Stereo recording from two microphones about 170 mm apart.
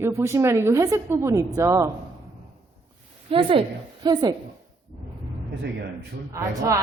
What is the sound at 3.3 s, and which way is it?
A woman's voice, 30° right (ahead or behind).